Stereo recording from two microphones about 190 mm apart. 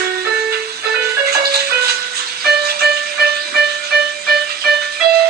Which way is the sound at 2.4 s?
55° right (ahead or behind).